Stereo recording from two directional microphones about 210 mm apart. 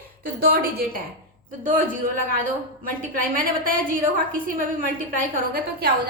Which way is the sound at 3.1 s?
40° right (ahead or behind).